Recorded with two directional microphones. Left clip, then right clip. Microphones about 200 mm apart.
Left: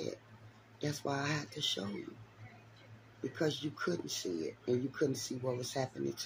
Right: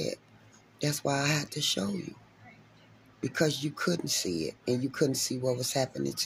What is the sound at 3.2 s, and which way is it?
Speech, 45° right (ahead or behind).